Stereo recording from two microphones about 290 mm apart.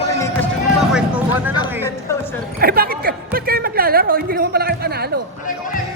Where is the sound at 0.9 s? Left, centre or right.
Centre.